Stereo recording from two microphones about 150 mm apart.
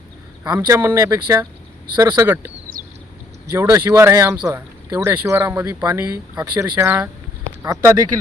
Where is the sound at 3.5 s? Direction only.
25° right (ahead or behind).